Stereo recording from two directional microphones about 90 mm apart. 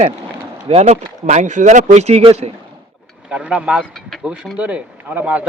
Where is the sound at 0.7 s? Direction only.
90° right.